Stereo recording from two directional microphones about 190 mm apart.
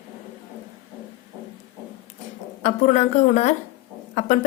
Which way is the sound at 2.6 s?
40° left (ahead or behind).